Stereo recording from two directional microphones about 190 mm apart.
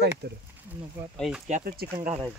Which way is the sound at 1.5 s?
50° right (ahead or behind).